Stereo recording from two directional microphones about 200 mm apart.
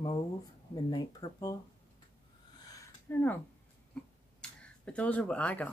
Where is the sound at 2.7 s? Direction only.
15° left (ahead or behind).